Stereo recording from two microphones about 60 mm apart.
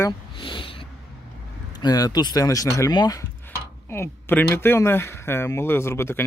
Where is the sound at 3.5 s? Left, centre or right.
Left.